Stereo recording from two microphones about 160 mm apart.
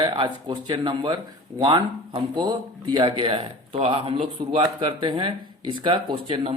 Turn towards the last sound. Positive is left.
turn(degrees=-30)  # may be behind; listen again after turning